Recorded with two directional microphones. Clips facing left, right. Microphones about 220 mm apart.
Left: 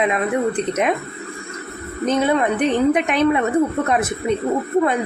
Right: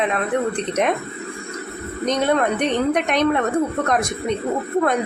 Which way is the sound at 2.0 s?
5° left (ahead or behind).